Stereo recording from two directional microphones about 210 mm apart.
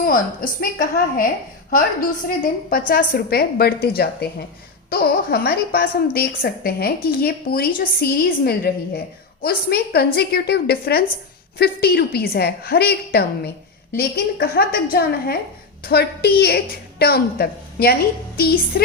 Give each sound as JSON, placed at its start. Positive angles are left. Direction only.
{"t": 0.0, "sound": "a woman's voice", "side_deg": 40}